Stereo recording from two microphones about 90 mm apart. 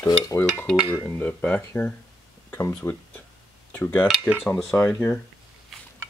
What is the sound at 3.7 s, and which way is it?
Cutlery, 20° left (ahead or behind).